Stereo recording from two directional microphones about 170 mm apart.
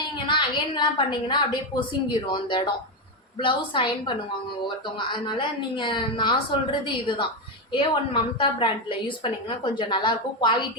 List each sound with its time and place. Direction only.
0.3 s a woman's voice: 30° left (ahead or behind)